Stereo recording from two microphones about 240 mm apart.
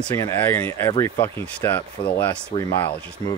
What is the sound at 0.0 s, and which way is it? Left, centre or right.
Speech, centre.